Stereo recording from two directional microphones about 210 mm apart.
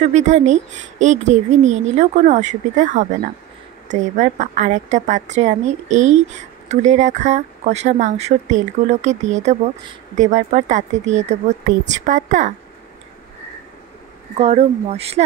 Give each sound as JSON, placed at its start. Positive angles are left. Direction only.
{"t": 0.0, "sound": "speech", "side_deg": -35}
{"t": 14.4, "sound": "speech", "side_deg": -30}